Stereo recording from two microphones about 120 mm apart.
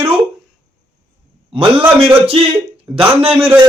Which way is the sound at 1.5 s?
50° right (ahead or behind).